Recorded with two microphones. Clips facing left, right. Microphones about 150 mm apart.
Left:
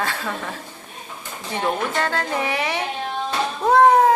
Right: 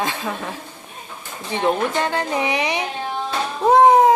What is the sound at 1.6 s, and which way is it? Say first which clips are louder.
A woman's voice: right 3 dB; 20° right (ahead or behind).